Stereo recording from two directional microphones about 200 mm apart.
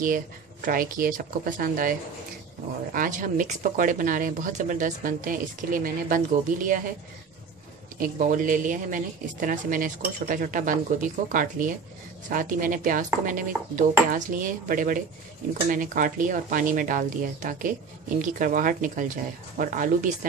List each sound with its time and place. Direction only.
0.0 s a woman's voice: 45° right (ahead or behind)
8.0 s a woman's voice: 40° right (ahead or behind)